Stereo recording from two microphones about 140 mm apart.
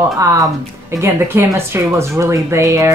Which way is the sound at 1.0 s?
20° right (ahead or behind).